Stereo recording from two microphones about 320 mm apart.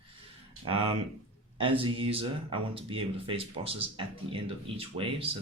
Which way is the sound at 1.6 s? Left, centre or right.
Centre.